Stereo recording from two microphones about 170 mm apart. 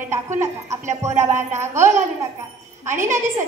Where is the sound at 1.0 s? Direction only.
15° right (ahead or behind).